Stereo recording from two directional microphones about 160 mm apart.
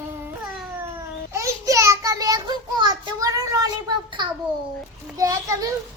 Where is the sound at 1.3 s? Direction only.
20° right (ahead or behind).